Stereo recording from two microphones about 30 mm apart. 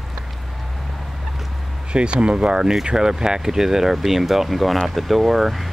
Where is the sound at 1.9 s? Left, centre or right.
Right.